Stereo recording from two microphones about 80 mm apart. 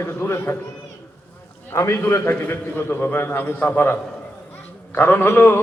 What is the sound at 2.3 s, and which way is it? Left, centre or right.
A man's voice, centre.